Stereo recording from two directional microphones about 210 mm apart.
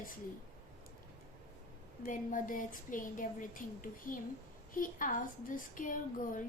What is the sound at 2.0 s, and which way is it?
A woman's voice, 40° left (ahead or behind).